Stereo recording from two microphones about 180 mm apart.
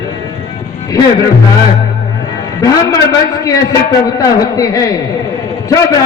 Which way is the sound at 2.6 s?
20° left (ahead or behind).